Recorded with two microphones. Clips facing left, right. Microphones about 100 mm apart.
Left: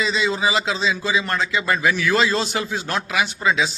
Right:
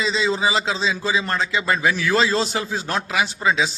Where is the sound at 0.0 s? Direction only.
25° right (ahead or behind).